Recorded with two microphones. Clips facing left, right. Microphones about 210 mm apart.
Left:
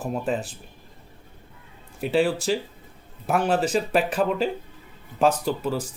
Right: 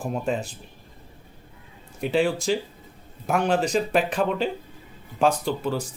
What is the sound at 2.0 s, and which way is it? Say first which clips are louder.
Speech: left 1 dB; 5° left (ahead or behind).